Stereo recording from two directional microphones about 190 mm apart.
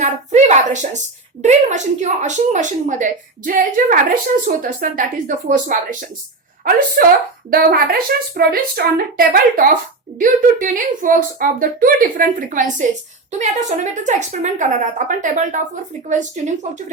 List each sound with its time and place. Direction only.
0.0 s a woman's voice: 40° right (ahead or behind)
7.5 s a woman's voice: 50° right (ahead or behind)